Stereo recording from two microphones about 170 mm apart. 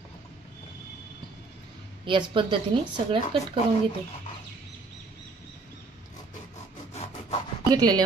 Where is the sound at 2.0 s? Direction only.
30° right (ahead or behind).